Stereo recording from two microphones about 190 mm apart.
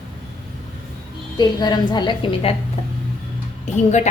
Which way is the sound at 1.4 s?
20° left (ahead or behind).